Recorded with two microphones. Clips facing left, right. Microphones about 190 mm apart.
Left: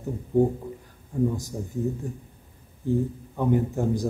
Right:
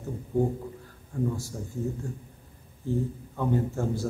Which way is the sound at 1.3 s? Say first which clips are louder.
Left 3 dB; 20° left (ahead or behind).